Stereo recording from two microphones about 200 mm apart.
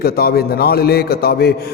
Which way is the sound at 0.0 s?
50° left (ahead or behind).